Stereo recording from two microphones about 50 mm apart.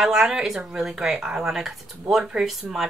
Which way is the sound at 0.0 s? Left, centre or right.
Centre.